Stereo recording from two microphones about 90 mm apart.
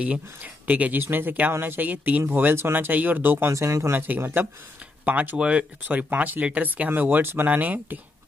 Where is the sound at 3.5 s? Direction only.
35° right (ahead or behind).